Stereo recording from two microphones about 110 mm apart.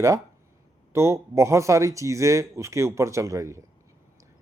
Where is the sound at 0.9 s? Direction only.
25° right (ahead or behind).